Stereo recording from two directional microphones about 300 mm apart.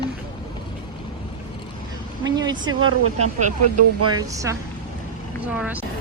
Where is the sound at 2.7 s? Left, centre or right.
Right.